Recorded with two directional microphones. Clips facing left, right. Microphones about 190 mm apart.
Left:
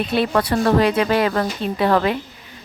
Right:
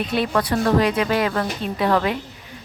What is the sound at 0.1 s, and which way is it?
Speech, 30° left (ahead or behind).